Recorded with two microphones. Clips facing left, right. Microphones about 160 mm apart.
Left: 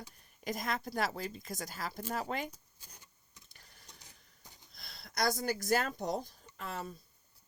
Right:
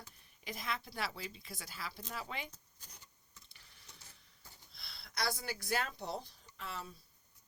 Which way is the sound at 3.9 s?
15° left (ahead or behind).